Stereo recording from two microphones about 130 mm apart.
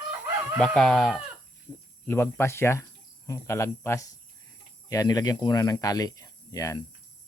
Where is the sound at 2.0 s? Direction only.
20° left (ahead or behind).